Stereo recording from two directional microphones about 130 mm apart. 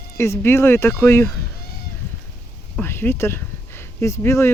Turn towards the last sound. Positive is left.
turn(degrees=20)  # may be behind; listen again after turning